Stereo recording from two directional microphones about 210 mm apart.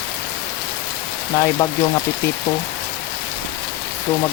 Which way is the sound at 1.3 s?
15° left (ahead or behind).